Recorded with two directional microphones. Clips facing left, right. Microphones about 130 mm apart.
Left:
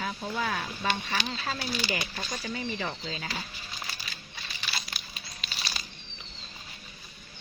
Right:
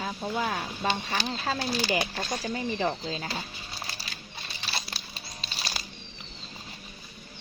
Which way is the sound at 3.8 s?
30° right (ahead or behind).